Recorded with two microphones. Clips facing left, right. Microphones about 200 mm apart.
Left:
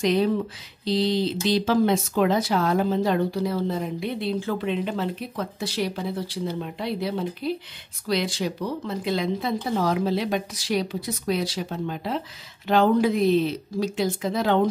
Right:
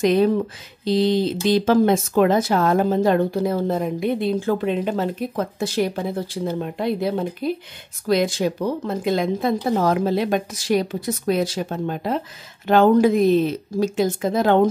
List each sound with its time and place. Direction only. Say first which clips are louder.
0.0 s speech: right 4 dB; 50° right (ahead or behind)